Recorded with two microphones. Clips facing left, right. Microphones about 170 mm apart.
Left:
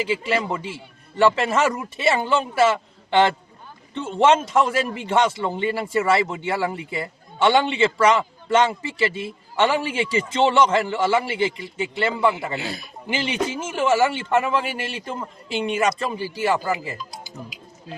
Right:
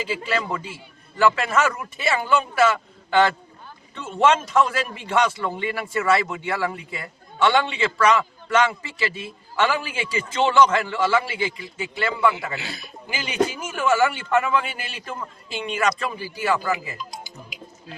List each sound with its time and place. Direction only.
0.3 s a man's voice: 25° left (ahead or behind)